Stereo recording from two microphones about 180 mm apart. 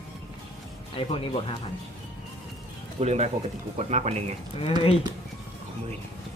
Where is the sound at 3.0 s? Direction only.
35° right (ahead or behind).